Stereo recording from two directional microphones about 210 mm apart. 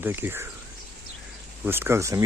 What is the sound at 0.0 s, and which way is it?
Speech, 10° right (ahead or behind).